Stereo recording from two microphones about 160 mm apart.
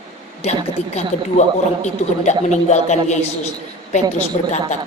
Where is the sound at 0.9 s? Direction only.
45° left (ahead or behind).